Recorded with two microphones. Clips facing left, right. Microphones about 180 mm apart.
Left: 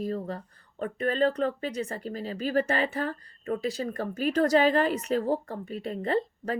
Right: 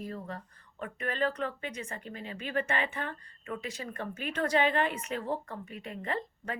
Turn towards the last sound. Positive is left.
turn(degrees=35)  # may be behind; listen again after turning